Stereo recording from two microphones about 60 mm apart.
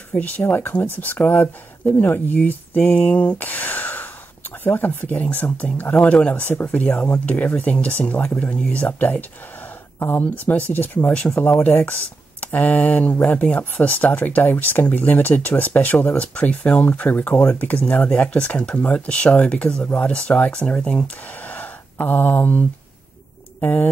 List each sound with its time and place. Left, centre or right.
0.1 s speech: left
0.4 s speech: left
9.9 s speech: left
11.1 s speech: centre
11.4 s speech: left
17.1 s speech: left; by 21.0 s centre
21.5 s gasp: left
23.6 s speech: left